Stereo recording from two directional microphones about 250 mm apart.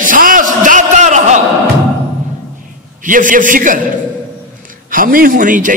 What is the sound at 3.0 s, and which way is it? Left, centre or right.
Speech, right.